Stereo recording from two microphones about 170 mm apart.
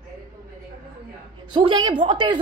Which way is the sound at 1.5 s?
25° right (ahead or behind).